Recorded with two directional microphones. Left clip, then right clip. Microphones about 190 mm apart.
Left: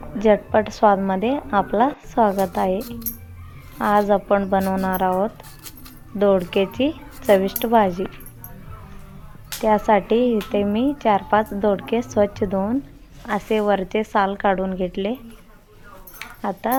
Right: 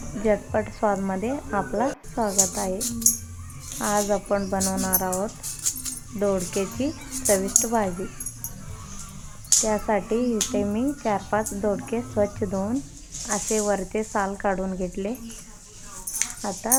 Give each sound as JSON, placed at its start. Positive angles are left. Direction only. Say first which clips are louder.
{"t": 0.2, "sound": "speech", "louder": "left 7 dB", "side_deg": 25}
{"t": 3.8, "sound": "speech", "louder": "left 6 dB", "side_deg": 25}
{"t": 9.6, "sound": "speech", "louder": "left 8 dB", "side_deg": 25}
{"t": 16.4, "sound": "speech", "louder": "left 9 dB", "side_deg": 20}